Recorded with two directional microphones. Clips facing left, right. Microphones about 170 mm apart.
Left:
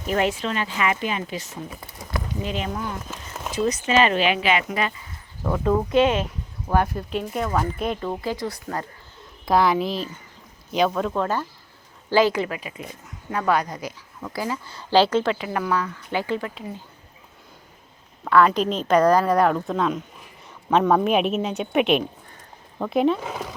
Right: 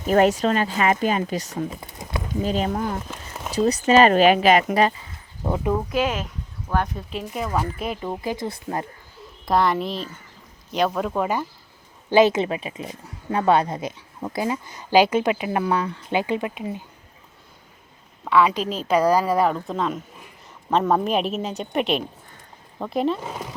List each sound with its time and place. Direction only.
0.1 s speech: 40° right (ahead or behind)
1.7 s a sound: 20° right (ahead or behind)
2.4 s speech: 40° right (ahead or behind)
3.1 s a sound: centre (ahead or behind)
3.5 s speech: 35° right (ahead or behind)
5.4 s speech: 20° right (ahead or behind)
5.9 s a woman's voice: 5° right (ahead or behind); by 8.9 s 25° right (ahead or behind)
9.2 s a woman's voice: centre (ahead or behind)
12.1 s speech: 20° right (ahead or behind)
18.3 s a woman's voice: centre (ahead or behind)